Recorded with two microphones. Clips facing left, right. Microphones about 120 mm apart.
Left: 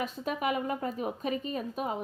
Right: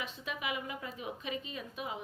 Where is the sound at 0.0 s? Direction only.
45° left (ahead or behind).